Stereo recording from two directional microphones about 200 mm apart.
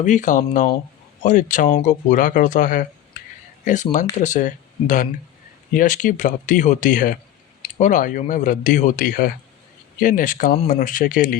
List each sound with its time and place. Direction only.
0.0 s speech: 40° left (ahead or behind)
3.9 s speech: 40° left (ahead or behind)